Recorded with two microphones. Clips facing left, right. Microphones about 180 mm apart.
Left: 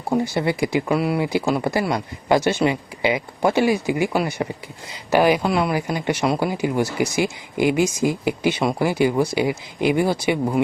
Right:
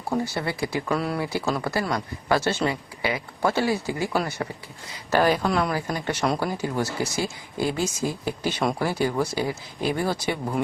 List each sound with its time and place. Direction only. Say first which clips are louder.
0.1 s speech: left 6 dB; 20° left (ahead or behind)